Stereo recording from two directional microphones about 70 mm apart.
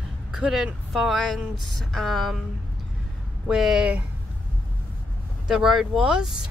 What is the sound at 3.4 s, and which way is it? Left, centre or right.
Speech, centre.